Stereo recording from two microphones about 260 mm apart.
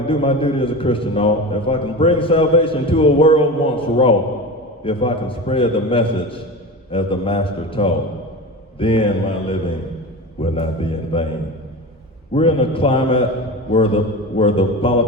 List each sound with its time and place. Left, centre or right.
0.1 s a man's voice: left
12.3 s a man's voice: left